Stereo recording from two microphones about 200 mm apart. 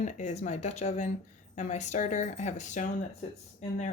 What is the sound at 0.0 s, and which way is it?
Speech, 35° left (ahead or behind).